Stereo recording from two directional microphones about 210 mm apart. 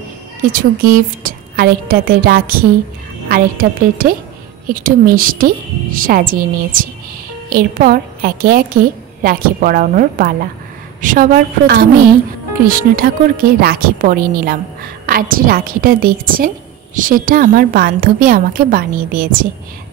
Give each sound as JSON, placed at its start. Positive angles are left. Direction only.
{"t": 0.5, "sound": "a woman's voice", "side_deg": -40}